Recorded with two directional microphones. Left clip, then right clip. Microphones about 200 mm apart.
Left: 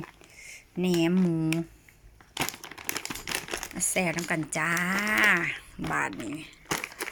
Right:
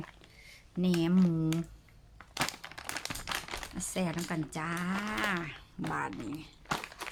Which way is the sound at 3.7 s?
10° left (ahead or behind).